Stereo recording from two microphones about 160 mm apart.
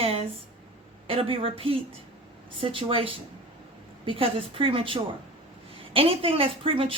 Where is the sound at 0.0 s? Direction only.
40° right (ahead or behind).